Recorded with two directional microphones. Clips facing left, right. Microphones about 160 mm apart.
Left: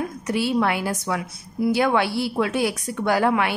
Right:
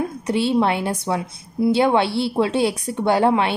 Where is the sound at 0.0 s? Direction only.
25° right (ahead or behind).